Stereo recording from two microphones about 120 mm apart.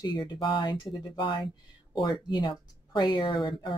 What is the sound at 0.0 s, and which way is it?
Speech, 35° left (ahead or behind).